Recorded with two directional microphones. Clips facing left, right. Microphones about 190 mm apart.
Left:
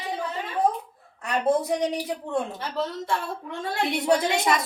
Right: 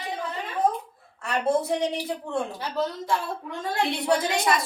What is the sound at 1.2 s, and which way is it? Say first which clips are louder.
Speech: left 1 dB; 15° left (ahead or behind).